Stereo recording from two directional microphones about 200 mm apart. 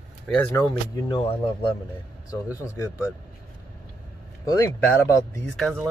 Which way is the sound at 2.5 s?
15° left (ahead or behind).